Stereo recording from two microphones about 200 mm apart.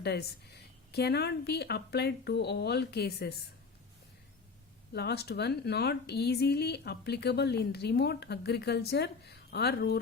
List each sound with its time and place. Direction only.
0.0 s speech: 55° left (ahead or behind)
4.9 s speech: 55° left (ahead or behind)